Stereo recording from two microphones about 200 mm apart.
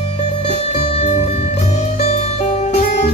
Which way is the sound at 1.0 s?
30° left (ahead or behind).